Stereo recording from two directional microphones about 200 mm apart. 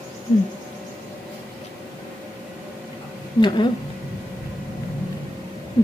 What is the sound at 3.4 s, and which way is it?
Speech, 20° left (ahead or behind).